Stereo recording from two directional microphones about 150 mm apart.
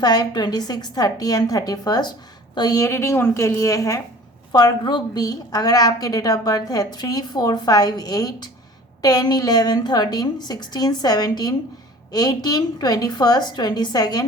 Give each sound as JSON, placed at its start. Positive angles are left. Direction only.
{"t": 0.0, "sound": "a woman's voice", "side_deg": 25}